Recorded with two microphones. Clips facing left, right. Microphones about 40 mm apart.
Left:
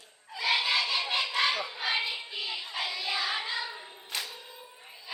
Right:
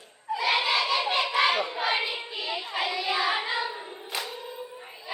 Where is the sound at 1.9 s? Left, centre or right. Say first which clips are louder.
Right 3 dB; centre.